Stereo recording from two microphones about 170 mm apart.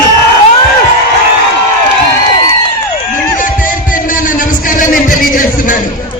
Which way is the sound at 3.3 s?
50° left (ahead or behind).